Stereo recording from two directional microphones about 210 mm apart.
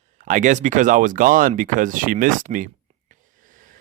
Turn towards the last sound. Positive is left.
turn(degrees=-40)  # may be behind; listen again after turning